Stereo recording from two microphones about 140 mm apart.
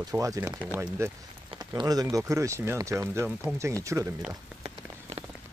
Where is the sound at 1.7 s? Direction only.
30° right (ahead or behind).